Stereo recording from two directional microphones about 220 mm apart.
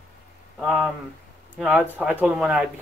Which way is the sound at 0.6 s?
Centre (ahead or behind).